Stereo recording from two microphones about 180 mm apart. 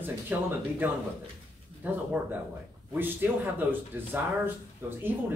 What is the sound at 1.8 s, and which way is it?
A man's voice, 10° right (ahead or behind).